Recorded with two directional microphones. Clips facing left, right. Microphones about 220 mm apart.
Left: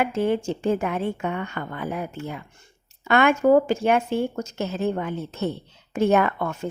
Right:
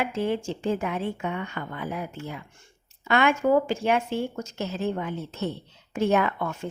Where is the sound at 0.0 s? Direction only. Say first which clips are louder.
Left 4 dB; 50° left (ahead or behind).